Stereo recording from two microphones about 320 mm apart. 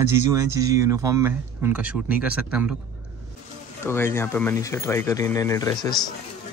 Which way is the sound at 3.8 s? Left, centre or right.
Centre.